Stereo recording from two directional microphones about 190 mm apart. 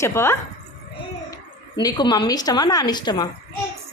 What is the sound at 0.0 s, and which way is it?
Speech, 15° left (ahead or behind).